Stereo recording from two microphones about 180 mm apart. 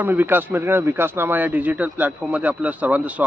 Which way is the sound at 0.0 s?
10° right (ahead or behind).